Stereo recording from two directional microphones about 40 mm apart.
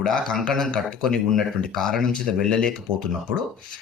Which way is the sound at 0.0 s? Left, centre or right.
Centre.